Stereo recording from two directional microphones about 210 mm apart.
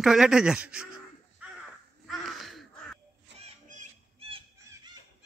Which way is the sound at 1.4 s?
5° right (ahead or behind).